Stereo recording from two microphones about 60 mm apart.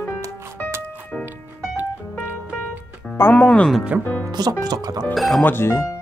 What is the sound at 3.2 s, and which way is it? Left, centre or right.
Speech, left.